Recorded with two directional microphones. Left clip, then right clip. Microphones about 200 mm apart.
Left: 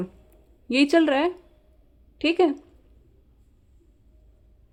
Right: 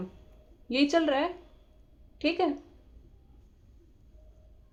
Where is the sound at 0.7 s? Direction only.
50° left (ahead or behind).